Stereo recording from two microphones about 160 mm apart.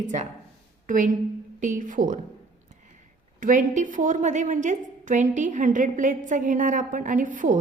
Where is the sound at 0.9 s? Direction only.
55° right (ahead or behind).